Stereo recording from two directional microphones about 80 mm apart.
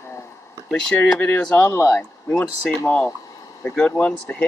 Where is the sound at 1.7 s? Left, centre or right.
Left.